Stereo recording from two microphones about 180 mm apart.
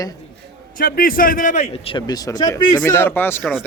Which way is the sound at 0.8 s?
55° left (ahead or behind).